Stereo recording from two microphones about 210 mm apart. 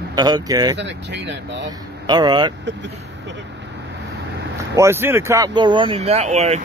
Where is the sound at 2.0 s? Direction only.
20° right (ahead or behind).